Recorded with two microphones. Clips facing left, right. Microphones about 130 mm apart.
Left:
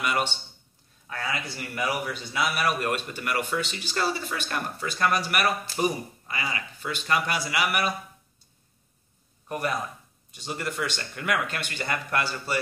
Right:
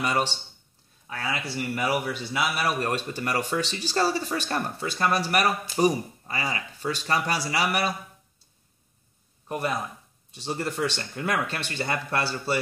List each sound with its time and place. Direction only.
0.0 s speech: 35° right (ahead or behind)
1.0 s a sound: 10° right (ahead or behind)
1.4 s speech: 30° right (ahead or behind)
10.3 s speech: 30° right (ahead or behind)